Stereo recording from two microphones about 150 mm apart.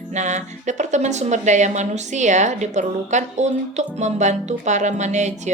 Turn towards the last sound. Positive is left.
turn(degrees=-50)  # may be behind; listen again after turning